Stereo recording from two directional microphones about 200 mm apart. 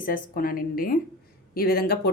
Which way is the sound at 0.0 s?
45° left (ahead or behind).